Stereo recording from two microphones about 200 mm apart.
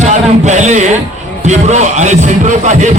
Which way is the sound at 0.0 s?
35° right (ahead or behind).